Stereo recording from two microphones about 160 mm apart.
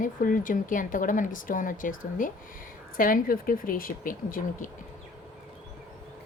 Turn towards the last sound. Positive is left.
turn(degrees=60)  # may be behind; listen again after turning